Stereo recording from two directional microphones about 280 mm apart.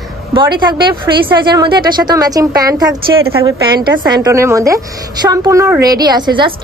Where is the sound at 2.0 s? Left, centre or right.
Centre.